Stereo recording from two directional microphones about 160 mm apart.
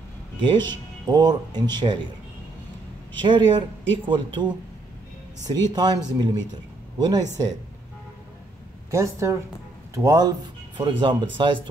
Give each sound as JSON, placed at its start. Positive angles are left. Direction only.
{"t": 1.0, "sound": "speech", "side_deg": -25}
{"t": 3.2, "sound": "speech", "side_deg": -30}
{"t": 5.5, "sound": "speech", "side_deg": -25}
{"t": 8.9, "sound": "speech", "side_deg": -15}